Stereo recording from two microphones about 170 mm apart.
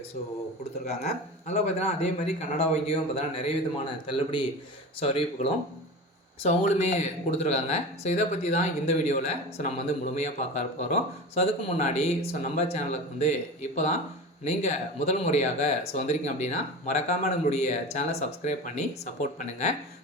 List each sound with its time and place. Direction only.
0.9 s speech: 40° left (ahead or behind)